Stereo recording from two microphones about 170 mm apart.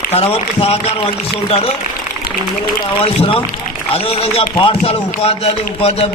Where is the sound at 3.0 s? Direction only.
35° left (ahead or behind).